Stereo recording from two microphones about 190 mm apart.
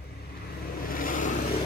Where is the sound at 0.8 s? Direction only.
45° left (ahead or behind).